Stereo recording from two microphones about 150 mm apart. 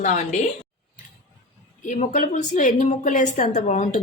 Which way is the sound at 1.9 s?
60° left (ahead or behind).